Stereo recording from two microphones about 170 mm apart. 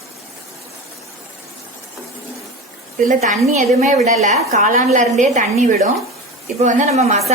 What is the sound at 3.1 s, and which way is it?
A woman's voice, 45° right (ahead or behind).